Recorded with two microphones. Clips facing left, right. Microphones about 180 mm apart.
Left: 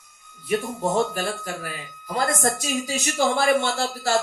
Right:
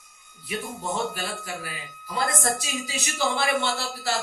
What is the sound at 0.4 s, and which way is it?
Speech, 45° left (ahead or behind).